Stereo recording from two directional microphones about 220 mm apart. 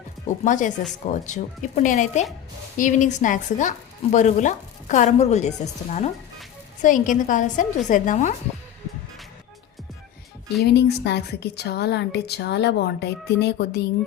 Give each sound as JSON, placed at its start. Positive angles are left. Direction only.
{"t": 0.4, "sound": "speech", "side_deg": 35}
{"t": 10.6, "sound": "a woman's voice", "side_deg": 50}